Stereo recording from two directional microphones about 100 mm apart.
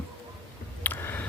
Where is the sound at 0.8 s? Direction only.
20° left (ahead or behind).